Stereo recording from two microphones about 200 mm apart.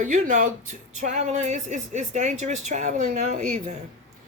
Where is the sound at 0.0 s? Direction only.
40° right (ahead or behind).